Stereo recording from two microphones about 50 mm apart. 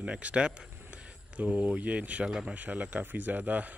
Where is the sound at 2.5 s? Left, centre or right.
Right.